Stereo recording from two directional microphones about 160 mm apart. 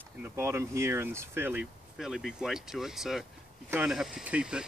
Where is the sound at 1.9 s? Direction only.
Centre (ahead or behind).